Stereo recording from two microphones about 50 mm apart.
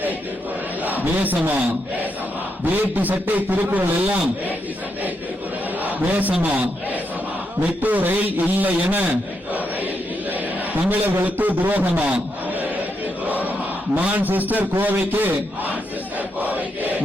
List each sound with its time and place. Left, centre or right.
1.2 s a man's voice: right
2.9 s a man's voice: right
5.8 s a man's voice: right
7.6 s a man's voice: right
10.8 s a man's voice: right
13.9 s a man's voice: right
16.4 s a sound: right